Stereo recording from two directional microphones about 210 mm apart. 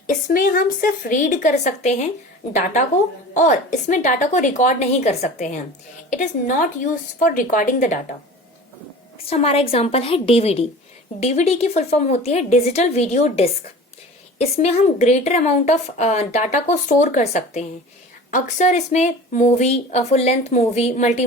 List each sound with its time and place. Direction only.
0.1 s a woman's voice: 40° left (ahead or behind)
3.3 s a woman's voice: 35° left (ahead or behind)
7.2 s a woman's voice: 40° left (ahead or behind)
9.1 s a woman's voice: 30° left (ahead or behind)